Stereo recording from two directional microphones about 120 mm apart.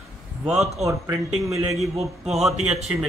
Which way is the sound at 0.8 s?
25° right (ahead or behind).